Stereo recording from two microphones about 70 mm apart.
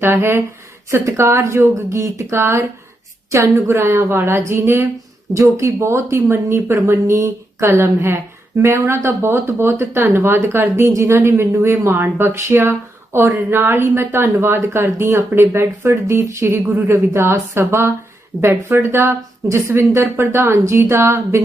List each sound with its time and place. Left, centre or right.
0.0 s speech: right